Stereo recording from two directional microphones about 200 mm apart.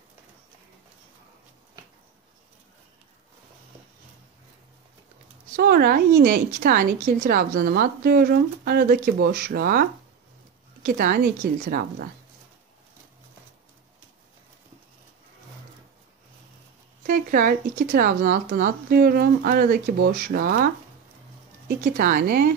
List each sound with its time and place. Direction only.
5.6 s a woman's voice: 50° right (ahead or behind)
10.9 s a woman's voice: 45° right (ahead or behind)
17.0 s a woman's voice: 45° right (ahead or behind)